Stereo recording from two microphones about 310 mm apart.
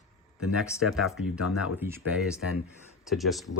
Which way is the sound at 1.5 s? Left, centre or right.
Left.